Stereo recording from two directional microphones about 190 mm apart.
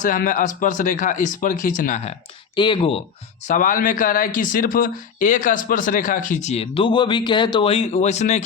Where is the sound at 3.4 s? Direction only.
40° left (ahead or behind).